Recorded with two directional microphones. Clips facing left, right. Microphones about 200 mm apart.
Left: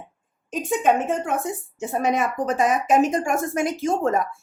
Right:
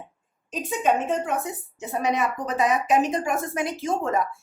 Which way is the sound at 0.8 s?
50° left (ahead or behind).